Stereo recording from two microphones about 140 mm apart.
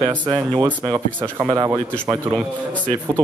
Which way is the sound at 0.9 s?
15° right (ahead or behind).